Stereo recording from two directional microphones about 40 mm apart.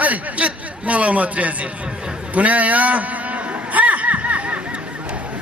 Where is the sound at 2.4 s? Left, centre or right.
Right.